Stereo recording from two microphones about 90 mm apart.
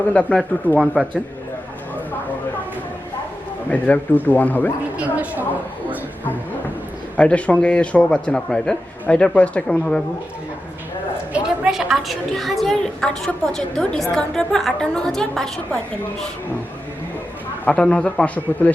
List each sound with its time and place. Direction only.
0.1 s speech: 15° left (ahead or behind)
1.0 s a man's voice: 10° right (ahead or behind)
3.7 s a man's voice: 20° left (ahead or behind)
4.9 s a sound: 15° right (ahead or behind)
7.2 s speech: 15° left (ahead or behind)
11.3 s a woman's voice: 10° right (ahead or behind); by 15.4 s 5° left (ahead or behind)
17.7 s speech: 10° left (ahead or behind)